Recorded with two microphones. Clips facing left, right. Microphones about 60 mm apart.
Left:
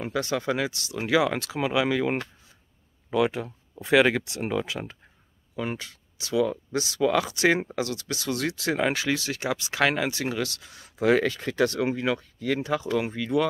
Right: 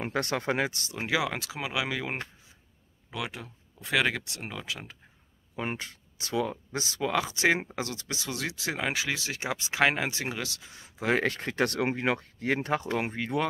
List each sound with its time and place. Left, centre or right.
0.0 s speech: right
0.9 s speech: centre
5.6 s speech: right; by 7.7 s centre
7.7 s speech: right
11.4 s speech: right